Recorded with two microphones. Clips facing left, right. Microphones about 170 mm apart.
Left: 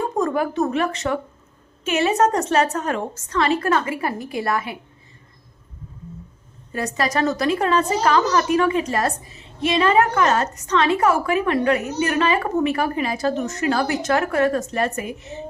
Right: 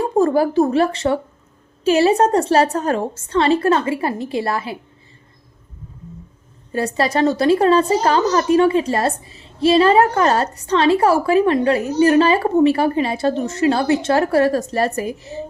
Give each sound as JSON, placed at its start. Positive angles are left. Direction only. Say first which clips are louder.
{"t": 0.0, "sound": "a woman's voice", "louder": "right 6 dB", "side_deg": -35}
{"t": 6.7, "sound": "a woman's voice", "louder": "right 4 dB", "side_deg": -30}